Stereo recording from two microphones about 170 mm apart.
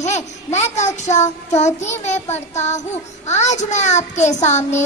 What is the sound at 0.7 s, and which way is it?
A child's voice, 40° left (ahead or behind).